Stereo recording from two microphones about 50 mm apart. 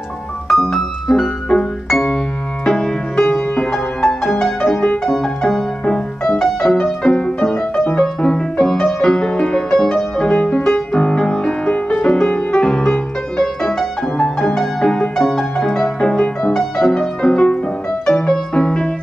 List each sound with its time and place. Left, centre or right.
0.5 s music: centre
7.7 s music: left
8.0 s music: centre